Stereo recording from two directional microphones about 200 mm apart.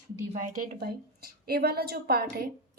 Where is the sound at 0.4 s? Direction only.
40° right (ahead or behind).